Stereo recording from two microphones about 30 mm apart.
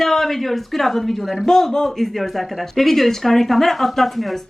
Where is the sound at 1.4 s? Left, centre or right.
Centre.